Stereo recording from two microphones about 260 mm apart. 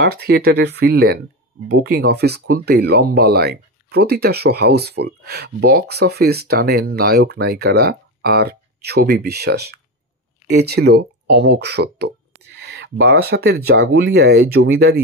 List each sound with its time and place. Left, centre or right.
0.0 s speech: right